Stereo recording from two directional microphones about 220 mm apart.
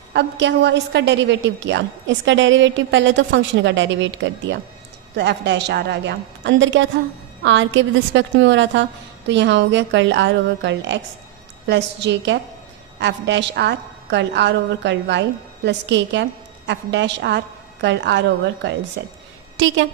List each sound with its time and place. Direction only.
0.1 s a woman's voice: 50° right (ahead or behind)